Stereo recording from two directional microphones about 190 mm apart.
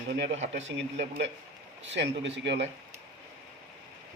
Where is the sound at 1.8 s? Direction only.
70° right (ahead or behind).